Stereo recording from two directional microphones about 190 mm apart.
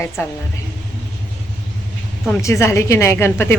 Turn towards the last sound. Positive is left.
turn(degrees=15)  # may be behind; listen again after turning